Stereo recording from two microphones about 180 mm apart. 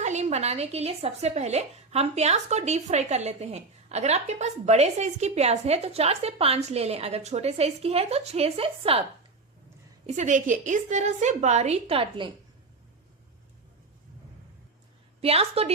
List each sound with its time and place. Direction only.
0.0 s a woman's voice: 40° right (ahead or behind)
10.1 s a woman's voice: 40° right (ahead or behind)
15.2 s a woman's voice: 35° right (ahead or behind)